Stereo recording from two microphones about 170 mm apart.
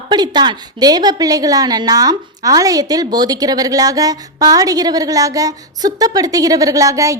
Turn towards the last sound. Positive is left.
turn(degrees=-20)  # may be behind; listen again after turning